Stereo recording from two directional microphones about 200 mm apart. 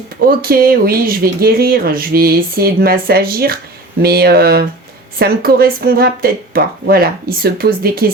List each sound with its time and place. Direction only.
0.3 s speech: 50° right (ahead or behind)